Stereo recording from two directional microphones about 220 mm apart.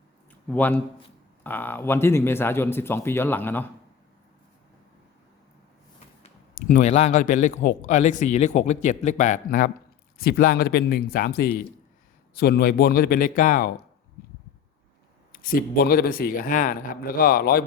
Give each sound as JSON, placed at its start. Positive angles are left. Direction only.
{"t": 0.4, "sound": "speech", "side_deg": 5}
{"t": 6.5, "sound": "a man's voice", "side_deg": 40}
{"t": 15.3, "sound": "a man's voice", "side_deg": 40}